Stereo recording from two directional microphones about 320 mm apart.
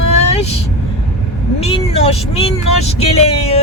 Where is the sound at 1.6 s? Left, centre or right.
Centre.